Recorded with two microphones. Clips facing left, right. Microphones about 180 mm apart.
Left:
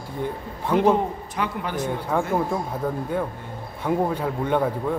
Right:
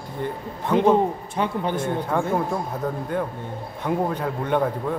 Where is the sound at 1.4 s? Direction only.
30° right (ahead or behind).